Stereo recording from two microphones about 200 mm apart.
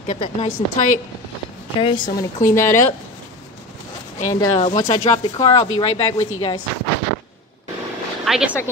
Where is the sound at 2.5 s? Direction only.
15° left (ahead or behind).